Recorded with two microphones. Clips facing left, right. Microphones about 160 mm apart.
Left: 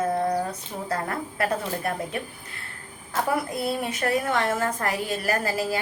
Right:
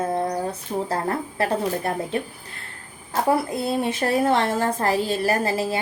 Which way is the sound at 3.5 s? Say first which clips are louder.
Right 4 dB; 25° right (ahead or behind).